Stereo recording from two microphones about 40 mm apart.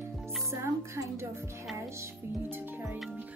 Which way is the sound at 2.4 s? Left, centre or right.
Right.